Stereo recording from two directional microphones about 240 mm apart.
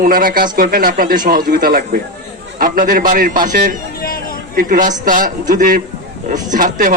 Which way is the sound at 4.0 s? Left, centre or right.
Left.